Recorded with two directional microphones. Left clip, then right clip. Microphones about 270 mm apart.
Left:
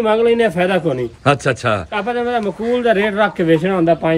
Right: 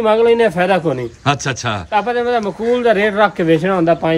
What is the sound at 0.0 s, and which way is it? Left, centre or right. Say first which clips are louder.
Speech: right 2 dB; right.